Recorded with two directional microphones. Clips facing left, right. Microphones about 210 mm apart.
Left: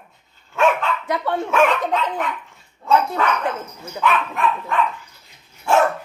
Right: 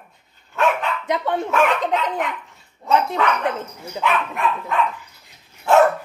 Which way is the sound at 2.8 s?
20° right (ahead or behind).